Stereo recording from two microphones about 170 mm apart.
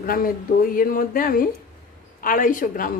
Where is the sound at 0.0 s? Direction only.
60° left (ahead or behind).